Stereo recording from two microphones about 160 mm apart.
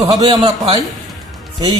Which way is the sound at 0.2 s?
35° right (ahead or behind).